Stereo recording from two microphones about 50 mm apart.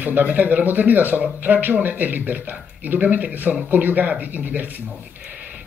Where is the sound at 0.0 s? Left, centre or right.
Right.